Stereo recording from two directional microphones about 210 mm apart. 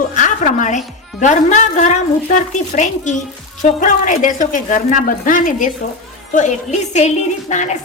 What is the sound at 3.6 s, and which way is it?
A woman's voice, 35° left (ahead or behind).